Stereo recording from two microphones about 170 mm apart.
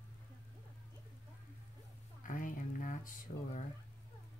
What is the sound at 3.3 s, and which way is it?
Music, 45° left (ahead or behind).